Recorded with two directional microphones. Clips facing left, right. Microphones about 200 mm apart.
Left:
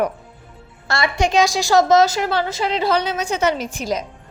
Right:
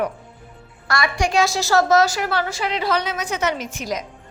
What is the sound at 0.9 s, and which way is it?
A woman's voice, 25° left (ahead or behind).